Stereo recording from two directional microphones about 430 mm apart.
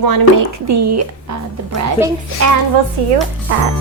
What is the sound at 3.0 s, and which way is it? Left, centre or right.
Speech, right.